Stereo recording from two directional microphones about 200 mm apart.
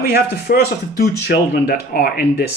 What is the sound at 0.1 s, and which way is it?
Speech, 55° left (ahead or behind).